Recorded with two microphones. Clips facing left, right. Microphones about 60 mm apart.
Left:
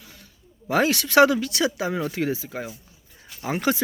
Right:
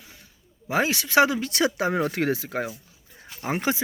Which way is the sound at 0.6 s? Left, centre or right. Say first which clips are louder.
Left 3 dB; centre.